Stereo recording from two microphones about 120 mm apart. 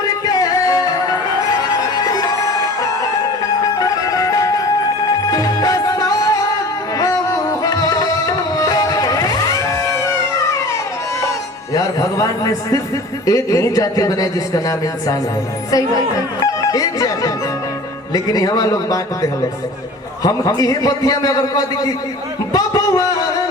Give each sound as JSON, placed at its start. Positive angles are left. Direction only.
{"t": 0.0, "sound": "music", "side_deg": 30}
{"t": 3.8, "sound": "music", "side_deg": 30}
{"t": 11.7, "sound": "music", "side_deg": 30}
{"t": 13.2, "sound": "speech", "side_deg": 30}
{"t": 22.5, "sound": "a sound", "side_deg": 30}